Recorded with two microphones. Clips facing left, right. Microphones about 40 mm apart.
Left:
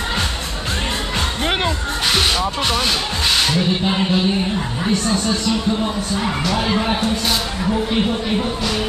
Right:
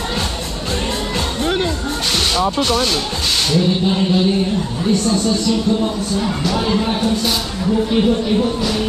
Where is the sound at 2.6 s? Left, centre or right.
Centre.